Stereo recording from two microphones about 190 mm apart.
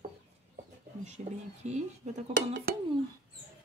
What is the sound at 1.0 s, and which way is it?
Speech, 35° right (ahead or behind).